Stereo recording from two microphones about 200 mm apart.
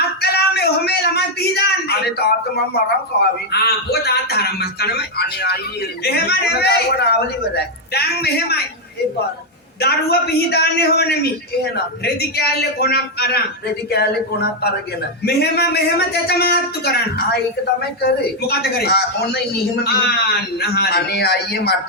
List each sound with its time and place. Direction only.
0.2 s a sound: 55° left (ahead or behind)
3.1 s a man's voice: 55° left (ahead or behind)
9.8 s a man's voice: 55° left (ahead or behind)
18.0 s a man's voice: 55° left (ahead or behind)